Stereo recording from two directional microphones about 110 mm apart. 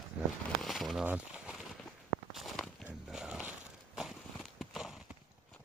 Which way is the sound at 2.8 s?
5° right (ahead or behind).